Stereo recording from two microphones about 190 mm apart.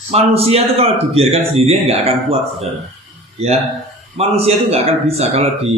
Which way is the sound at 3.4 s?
35° right (ahead or behind).